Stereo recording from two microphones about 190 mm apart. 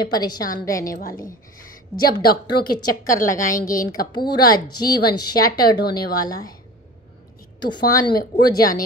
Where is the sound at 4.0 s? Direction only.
55° left (ahead or behind).